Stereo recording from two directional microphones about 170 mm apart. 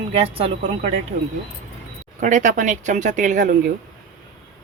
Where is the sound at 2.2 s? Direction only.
50° right (ahead or behind).